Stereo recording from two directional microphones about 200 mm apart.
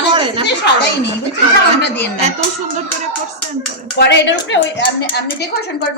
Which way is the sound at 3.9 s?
60° left (ahead or behind).